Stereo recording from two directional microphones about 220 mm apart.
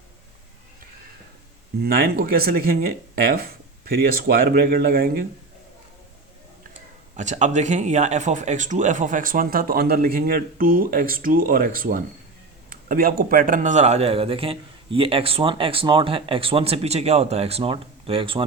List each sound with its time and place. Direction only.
1.8 s speech: 45° right (ahead or behind)
7.2 s speech: 30° right (ahead or behind)